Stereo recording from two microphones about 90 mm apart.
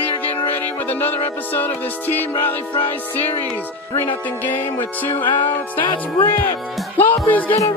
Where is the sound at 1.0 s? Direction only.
20° left (ahead or behind).